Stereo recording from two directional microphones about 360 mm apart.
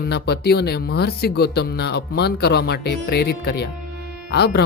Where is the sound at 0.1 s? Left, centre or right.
Left.